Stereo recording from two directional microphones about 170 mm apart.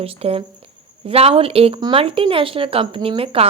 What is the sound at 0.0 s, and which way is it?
A woman's voice, 35° right (ahead or behind).